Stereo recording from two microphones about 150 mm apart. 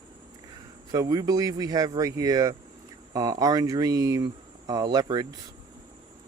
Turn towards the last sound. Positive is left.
turn(degrees=-25)  # may be behind; listen again after turning